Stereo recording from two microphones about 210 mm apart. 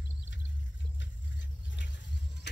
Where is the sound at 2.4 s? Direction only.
55° left (ahead or behind).